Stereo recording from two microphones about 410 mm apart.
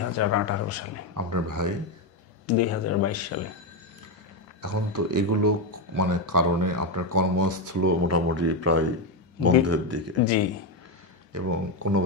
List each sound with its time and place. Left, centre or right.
0.2 s speech: left
1.1 s speech: right
2.4 s speech: left
4.6 s speech: right
11.3 s speech: right